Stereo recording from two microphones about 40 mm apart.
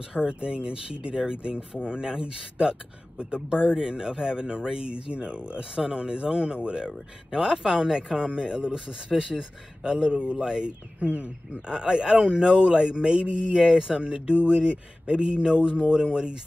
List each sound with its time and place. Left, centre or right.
0.4 s speech: right
11.0 s speech: right
11.7 s speech: right